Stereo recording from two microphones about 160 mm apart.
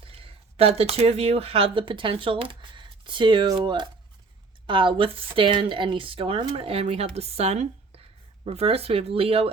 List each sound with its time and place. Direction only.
0.0 s speech: 35° right (ahead or behind)